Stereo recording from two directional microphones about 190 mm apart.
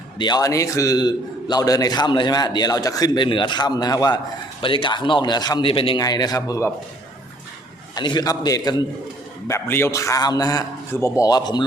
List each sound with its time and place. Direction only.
0.2 s a man's voice: 20° left (ahead or behind)
7.9 s a man's voice: 20° left (ahead or behind)